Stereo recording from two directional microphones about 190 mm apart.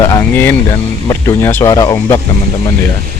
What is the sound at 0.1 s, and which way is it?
Vehicle, 10° left (ahead or behind).